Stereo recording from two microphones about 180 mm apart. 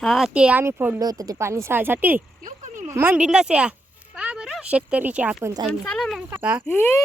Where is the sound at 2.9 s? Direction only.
10° right (ahead or behind).